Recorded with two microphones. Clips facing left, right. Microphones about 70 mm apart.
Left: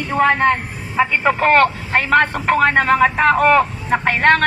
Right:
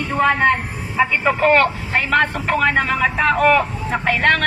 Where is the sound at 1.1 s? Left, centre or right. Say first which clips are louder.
Left 1 dB; left.